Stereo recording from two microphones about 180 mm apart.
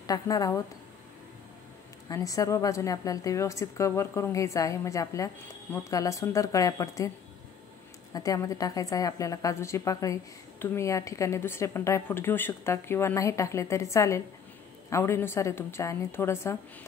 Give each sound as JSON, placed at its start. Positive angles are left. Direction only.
{"t": 0.0, "sound": "a woman's voice", "side_deg": 20}
{"t": 2.0, "sound": "a woman's voice", "side_deg": 20}
{"t": 8.1, "sound": "a woman's voice", "side_deg": 20}